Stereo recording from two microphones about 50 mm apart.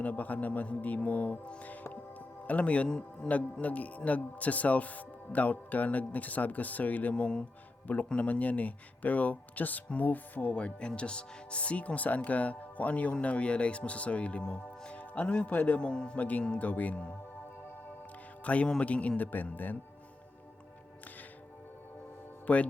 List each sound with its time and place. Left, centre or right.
0.0 s a man's voice: left
1.6 s music: left
2.5 s a man's voice: left
10.5 s speech: left
14.9 s music: left
15.5 s a man's voice: left
15.8 s speech: centre
16.6 s a man's voice: left
18.4 s speech: left
22.5 s a man's voice: left